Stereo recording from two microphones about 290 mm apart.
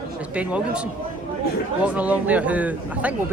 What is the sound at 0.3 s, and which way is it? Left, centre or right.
Speech, centre.